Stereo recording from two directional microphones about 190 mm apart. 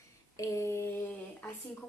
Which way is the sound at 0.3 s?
15° left (ahead or behind).